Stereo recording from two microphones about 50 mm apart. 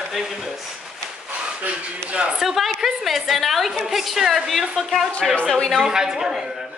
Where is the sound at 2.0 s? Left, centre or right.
Right.